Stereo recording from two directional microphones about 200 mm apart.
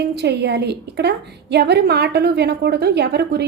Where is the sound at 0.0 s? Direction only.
55° right (ahead or behind).